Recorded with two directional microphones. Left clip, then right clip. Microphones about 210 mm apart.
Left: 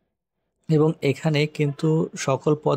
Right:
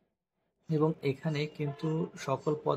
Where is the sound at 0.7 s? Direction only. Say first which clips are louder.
Left 10 dB; 40° left (ahead or behind).